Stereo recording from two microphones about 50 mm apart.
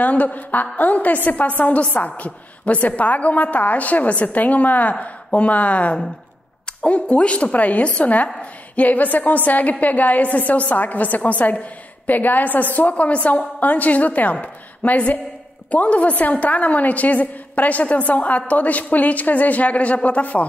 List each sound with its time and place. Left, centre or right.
0.0 s a woman's voice: left